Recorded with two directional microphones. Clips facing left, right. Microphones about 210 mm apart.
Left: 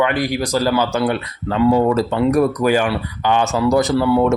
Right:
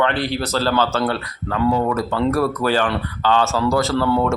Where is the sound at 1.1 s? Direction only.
25° left (ahead or behind).